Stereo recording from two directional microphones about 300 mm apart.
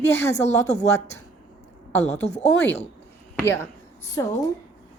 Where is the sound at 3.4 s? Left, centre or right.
Centre.